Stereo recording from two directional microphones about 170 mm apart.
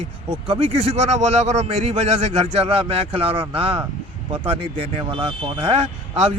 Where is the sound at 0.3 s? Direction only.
30° right (ahead or behind).